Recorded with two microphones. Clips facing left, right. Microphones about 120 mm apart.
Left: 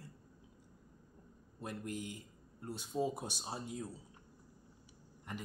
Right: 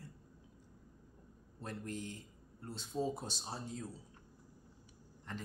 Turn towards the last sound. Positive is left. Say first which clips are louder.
# left 1 dB
turn(degrees=10)  # may be behind; listen again after turning